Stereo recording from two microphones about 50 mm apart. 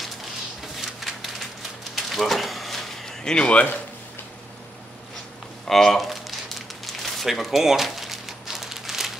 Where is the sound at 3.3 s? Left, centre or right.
Left.